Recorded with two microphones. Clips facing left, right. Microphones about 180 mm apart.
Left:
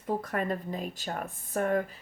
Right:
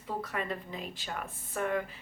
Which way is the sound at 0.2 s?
45° left (ahead or behind).